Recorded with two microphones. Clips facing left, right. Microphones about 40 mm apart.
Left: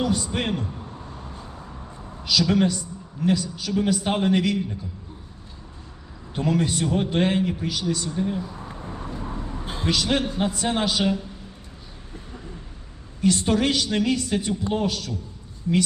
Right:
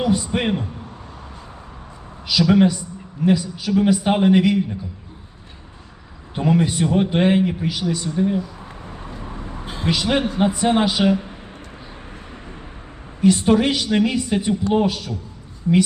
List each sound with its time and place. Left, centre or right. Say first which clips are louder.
0.0 s a man's voice: right 4 dB; centre
2.2 s a man's voice: right 5 dB; centre
6.3 s a man's voice: right 4 dB; centre
9.3 s a sound: even; right
9.8 s a man's voice: right 3 dB; centre
11.1 s a sound: right 6 dB; right
13.2 s a man's voice: right 5 dB; centre